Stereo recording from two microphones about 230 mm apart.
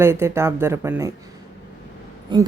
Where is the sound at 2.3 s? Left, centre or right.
Right.